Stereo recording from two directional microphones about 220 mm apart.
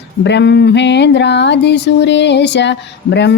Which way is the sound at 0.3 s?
50° left (ahead or behind).